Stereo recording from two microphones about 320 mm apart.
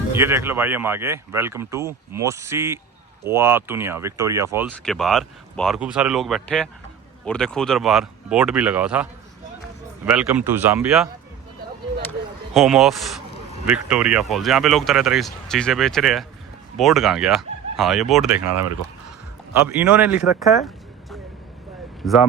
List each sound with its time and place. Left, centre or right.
0.2 s speech: centre
10.1 s speech: centre
12.5 s speech: centre
19.6 s speech: centre